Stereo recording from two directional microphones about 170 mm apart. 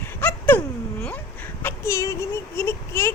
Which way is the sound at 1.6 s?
15° left (ahead or behind).